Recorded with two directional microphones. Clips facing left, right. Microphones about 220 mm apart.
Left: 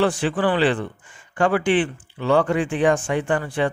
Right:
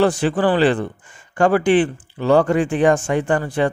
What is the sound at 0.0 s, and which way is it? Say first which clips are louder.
Speech: right 3 dB; 40° right (ahead or behind).